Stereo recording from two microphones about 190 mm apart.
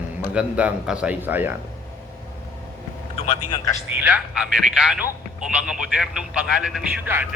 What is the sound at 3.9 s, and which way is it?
Speech, 10° right (ahead or behind).